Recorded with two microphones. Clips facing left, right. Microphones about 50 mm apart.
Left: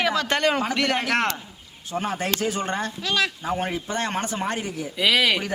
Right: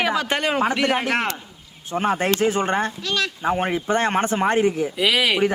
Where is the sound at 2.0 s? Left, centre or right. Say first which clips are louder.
Right 7 dB; right.